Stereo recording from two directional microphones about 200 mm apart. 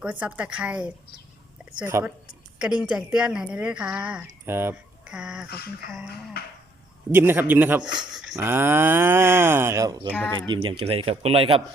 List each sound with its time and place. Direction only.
0.0 s speech: 5° right (ahead or behind)
6.4 s speech: 50° left (ahead or behind)
7.1 s speech: 10° right (ahead or behind)
7.8 s speech: 20° right (ahead or behind)
8.1 s a sound: centre (ahead or behind)
8.4 s speech: 10° right (ahead or behind)
10.1 s speech: 10° left (ahead or behind)
10.5 s speech: 25° right (ahead or behind)